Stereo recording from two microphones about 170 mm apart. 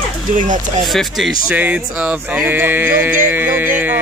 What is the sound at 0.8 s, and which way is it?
Speech, centre (ahead or behind).